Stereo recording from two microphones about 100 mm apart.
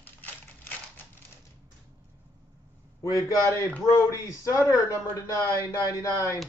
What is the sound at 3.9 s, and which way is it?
A man's voice, 30° left (ahead or behind).